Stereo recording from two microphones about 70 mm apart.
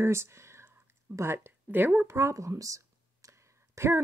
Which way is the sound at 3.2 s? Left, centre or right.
Right.